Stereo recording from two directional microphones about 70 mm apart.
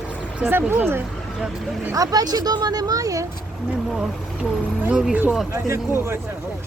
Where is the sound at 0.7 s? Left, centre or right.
Right.